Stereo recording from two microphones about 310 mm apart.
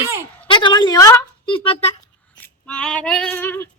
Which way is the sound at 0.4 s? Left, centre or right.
Centre.